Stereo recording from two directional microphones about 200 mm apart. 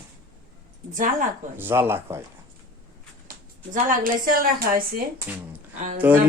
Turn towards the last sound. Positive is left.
turn(degrees=-5)  # may be behind; listen again after turning